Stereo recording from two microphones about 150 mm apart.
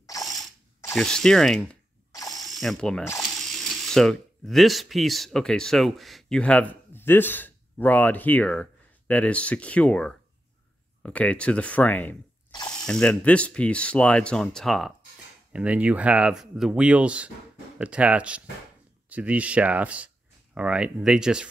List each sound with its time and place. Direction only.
0.0 s ratchet: 25° left (ahead or behind)
0.9 s speech: 5° left (ahead or behind)
2.1 s ratchet: 25° left (ahead or behind)
2.4 s ratchet: centre (ahead or behind)
3.2 s speech: centre (ahead or behind)